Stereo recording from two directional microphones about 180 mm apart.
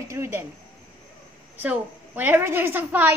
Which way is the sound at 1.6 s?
10° right (ahead or behind).